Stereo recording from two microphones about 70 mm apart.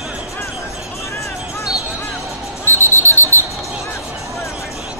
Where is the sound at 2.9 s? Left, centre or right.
Left.